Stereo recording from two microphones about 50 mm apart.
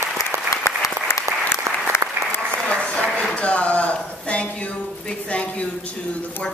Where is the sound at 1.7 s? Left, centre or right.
Right.